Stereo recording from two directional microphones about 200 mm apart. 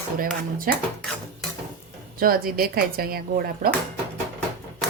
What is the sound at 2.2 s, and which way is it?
Speech, 45° right (ahead or behind).